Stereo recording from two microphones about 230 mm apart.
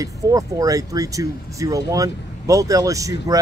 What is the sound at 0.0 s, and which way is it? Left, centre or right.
Speech, centre.